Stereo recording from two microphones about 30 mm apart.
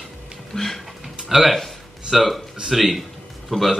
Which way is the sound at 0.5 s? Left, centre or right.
Centre.